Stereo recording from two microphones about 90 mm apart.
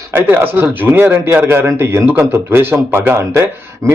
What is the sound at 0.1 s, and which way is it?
A man's voice, 20° right (ahead or behind).